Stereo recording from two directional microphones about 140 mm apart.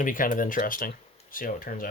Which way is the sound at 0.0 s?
75° left (ahead or behind).